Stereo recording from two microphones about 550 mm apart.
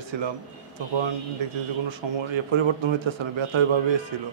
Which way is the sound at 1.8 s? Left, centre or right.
Right.